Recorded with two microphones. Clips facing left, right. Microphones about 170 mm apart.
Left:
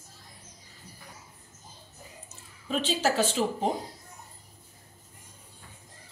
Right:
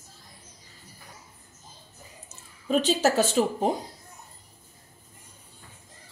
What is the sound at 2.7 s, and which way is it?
Speech, 45° right (ahead or behind).